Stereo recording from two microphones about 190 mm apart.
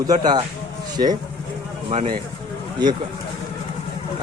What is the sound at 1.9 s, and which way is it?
Speech, 35° right (ahead or behind).